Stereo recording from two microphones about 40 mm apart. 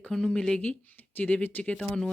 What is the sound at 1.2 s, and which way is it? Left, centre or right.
Speech, left.